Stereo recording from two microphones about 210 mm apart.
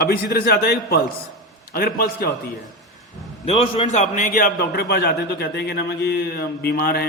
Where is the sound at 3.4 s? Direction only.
25° left (ahead or behind).